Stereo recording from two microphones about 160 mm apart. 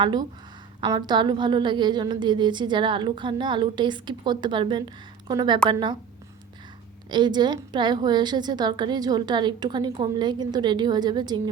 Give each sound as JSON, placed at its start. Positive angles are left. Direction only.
{"t": 0.0, "sound": "a woman's voice", "side_deg": -25}
{"t": 7.1, "sound": "a woman's voice", "side_deg": -30}